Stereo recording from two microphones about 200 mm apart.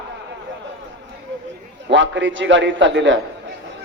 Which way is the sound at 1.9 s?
65° right (ahead or behind).